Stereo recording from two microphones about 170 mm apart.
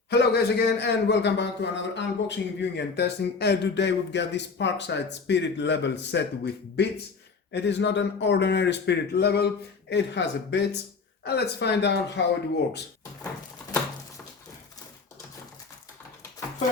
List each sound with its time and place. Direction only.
0.1 s a man's voice: 80° left
9.9 s a man's voice: 90° left
11.2 s speech: 75° left (ahead or behind); by 12.2 s 90° left